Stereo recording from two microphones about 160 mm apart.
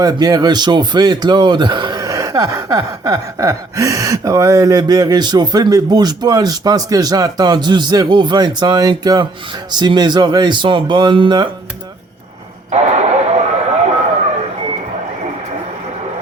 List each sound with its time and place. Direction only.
0.0 s a man's voice: 25° right (ahead or behind)
12.7 s radio: 45° right (ahead or behind)